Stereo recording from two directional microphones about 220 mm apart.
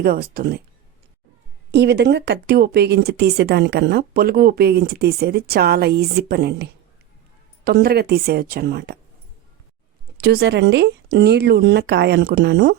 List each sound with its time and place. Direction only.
0.0 s a woman's voice: 45° right (ahead or behind)
1.7 s a woman's voice: 50° right (ahead or behind)
10.2 s a woman's voice: 45° right (ahead or behind)